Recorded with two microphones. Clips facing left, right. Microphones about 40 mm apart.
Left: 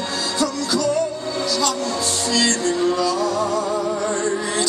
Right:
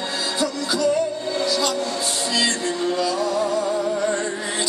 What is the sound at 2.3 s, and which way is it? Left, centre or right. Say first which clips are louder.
Music: left 4 dB; centre.